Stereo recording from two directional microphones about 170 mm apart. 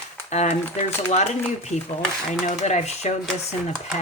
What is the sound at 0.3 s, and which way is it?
Speech, 40° left (ahead or behind).